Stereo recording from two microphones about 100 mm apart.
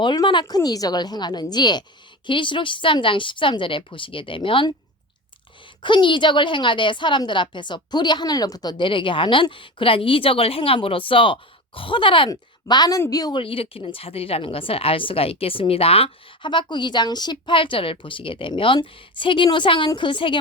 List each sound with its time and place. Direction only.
0.0 s a woman's voice: 50° left (ahead or behind)
5.8 s a woman's voice: 55° left (ahead or behind)
8.9 s speech: 60° left (ahead or behind)
12.3 s a woman's voice: 45° left (ahead or behind)
13.3 s speech: 65° left (ahead or behind)
16.4 s speech: 55° left (ahead or behind)